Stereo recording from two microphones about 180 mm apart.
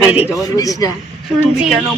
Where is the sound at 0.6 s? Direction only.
20° left (ahead or behind).